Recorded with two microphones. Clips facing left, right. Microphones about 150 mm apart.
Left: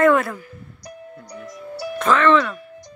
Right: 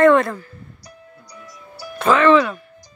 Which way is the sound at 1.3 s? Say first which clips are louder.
Left 8 dB; 60° left (ahead or behind).